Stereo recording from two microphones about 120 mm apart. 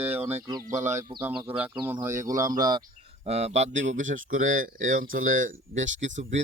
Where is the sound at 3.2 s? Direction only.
65° right (ahead or behind).